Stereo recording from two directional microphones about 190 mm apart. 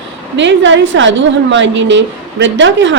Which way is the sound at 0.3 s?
75° right (ahead or behind).